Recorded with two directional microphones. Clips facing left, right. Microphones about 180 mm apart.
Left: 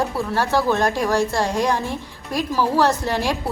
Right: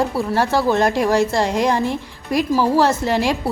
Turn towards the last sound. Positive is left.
turn(degrees=-15)  # may be behind; listen again after turning